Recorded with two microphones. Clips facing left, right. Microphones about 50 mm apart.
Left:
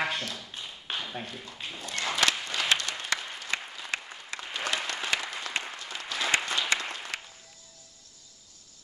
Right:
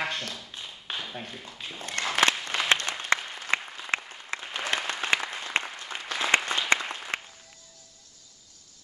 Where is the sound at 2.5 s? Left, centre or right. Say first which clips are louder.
Right 2 dB; right.